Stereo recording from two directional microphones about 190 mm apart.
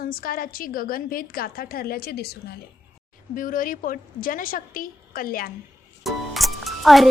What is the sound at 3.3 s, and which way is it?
A woman's voice, 45° left (ahead or behind).